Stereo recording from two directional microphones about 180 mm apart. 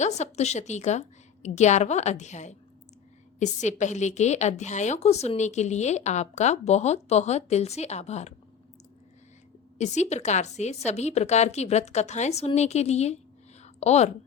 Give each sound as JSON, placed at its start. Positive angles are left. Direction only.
{"t": 0.0, "sound": "a woman's voice", "side_deg": 40}
{"t": 9.7, "sound": "a woman's voice", "side_deg": 40}
{"t": 13.6, "sound": "a sound", "side_deg": 40}